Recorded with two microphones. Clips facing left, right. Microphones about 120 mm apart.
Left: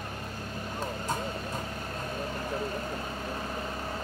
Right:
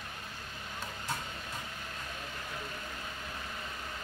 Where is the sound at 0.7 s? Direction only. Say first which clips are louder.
Left 6 dB; 40° left (ahead or behind).